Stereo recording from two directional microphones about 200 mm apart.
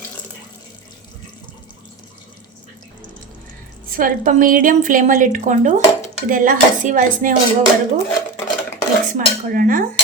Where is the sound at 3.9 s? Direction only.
45° right (ahead or behind).